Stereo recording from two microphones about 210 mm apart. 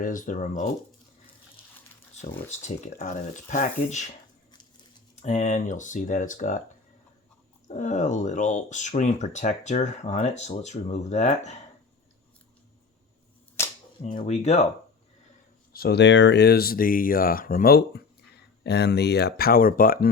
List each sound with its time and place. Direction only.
0.0 s speech: 40° left (ahead or behind)
2.5 s speech: 35° left (ahead or behind)
5.2 s speech: 35° left (ahead or behind)
7.7 s speech: 35° left (ahead or behind)
13.6 s cap gun: 10° left (ahead or behind)
14.0 s speech: 35° left (ahead or behind)
15.7 s speech: 50° left (ahead or behind)